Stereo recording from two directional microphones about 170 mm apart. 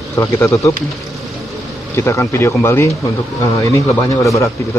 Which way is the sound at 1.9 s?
15° left (ahead or behind).